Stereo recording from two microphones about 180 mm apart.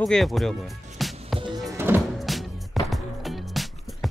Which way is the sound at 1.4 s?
25° right (ahead or behind).